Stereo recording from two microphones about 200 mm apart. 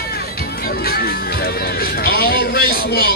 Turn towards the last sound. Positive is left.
turn(degrees=50)  # may be behind; listen again after turning